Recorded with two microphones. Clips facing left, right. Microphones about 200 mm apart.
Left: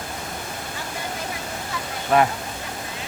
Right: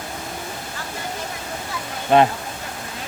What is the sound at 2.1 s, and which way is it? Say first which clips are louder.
Speech: right 3 dB; 25° right (ahead or behind).